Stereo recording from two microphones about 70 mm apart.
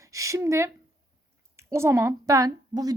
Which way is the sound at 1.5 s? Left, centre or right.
Right.